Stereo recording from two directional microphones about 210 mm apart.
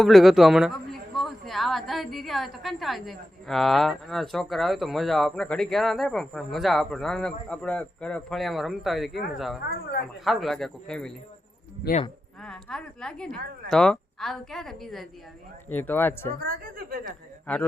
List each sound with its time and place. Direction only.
0.0 s speech: centre (ahead or behind)
11.8 s speech: 50° left (ahead or behind)
12.4 s speech: 5° left (ahead or behind)
16.4 s speech: 45° right (ahead or behind)
17.4 s speech: 5° left (ahead or behind)